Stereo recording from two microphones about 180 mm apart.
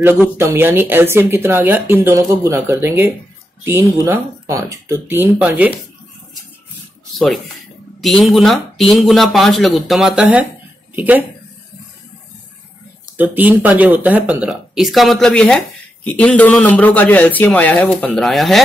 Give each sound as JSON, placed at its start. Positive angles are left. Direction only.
{"t": 0.0, "sound": "speech", "side_deg": -15}
{"t": 8.0, "sound": "speech", "side_deg": 0}
{"t": 13.2, "sound": "speech", "side_deg": -10}